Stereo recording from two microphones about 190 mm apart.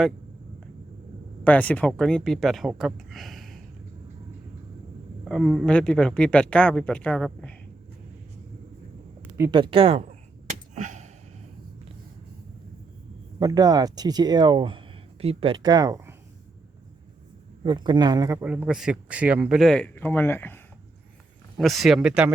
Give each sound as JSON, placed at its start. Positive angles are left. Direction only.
{"t": 1.5, "sound": "speech", "side_deg": 5}
{"t": 5.2, "sound": "speech", "side_deg": 0}
{"t": 9.4, "sound": "speech", "side_deg": -25}
{"t": 10.8, "sound": "gasp", "side_deg": -40}
{"t": 13.4, "sound": "speech", "side_deg": -20}
{"t": 17.6, "sound": "speech", "side_deg": -25}
{"t": 21.6, "sound": "speech", "side_deg": 0}